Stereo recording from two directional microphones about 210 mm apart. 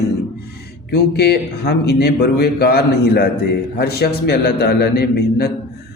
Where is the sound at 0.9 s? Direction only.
50° left (ahead or behind).